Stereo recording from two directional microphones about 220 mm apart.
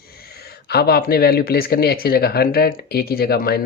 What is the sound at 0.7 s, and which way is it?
Speech, 45° left (ahead or behind).